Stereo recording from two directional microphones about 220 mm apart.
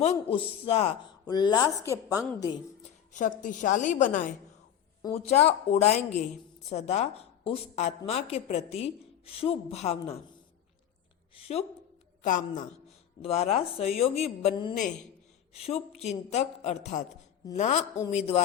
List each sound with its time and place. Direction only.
0.0 s a woman's voice: 25° left (ahead or behind)
3.1 s a woman's voice: 35° left (ahead or behind)
11.3 s a woman's voice: 25° left (ahead or behind)